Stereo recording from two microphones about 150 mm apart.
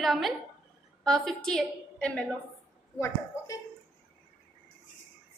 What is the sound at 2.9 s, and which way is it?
Speech, 20° left (ahead or behind).